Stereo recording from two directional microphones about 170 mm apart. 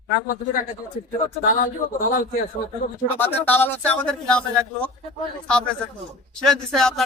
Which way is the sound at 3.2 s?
10° left (ahead or behind).